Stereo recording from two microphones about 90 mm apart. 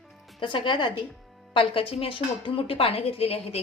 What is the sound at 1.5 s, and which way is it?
A woman's voice, 85° left.